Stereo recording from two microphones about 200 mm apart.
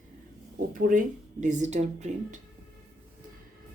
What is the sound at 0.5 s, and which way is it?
Speech, 45° right (ahead or behind).